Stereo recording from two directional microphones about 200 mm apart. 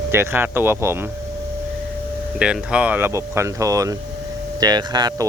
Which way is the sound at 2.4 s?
5° right (ahead or behind).